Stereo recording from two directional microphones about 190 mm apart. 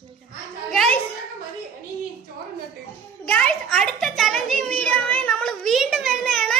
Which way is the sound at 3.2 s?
5° left (ahead or behind).